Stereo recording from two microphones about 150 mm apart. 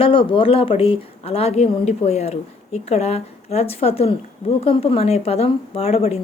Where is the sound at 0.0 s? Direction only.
35° left (ahead or behind).